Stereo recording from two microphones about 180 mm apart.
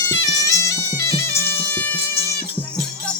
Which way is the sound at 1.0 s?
15° left (ahead or behind).